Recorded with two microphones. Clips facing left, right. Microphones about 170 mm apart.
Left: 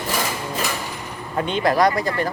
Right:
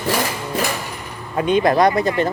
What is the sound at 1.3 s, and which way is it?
Speech, 15° right (ahead or behind).